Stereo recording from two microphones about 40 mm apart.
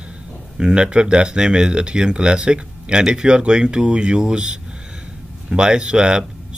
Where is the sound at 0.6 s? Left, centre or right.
Right.